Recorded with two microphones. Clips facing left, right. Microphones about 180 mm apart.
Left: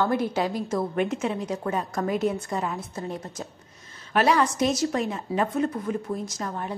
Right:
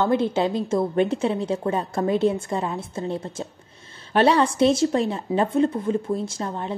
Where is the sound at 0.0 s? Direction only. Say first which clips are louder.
Right 4 dB; 25° right (ahead or behind).